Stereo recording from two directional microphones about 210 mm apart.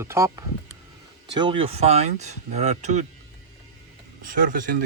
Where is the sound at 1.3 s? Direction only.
25° right (ahead or behind).